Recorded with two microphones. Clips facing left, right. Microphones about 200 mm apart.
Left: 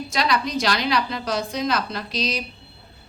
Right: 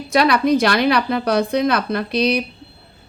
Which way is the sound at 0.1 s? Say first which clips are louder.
Right 9 dB; 60° right (ahead or behind).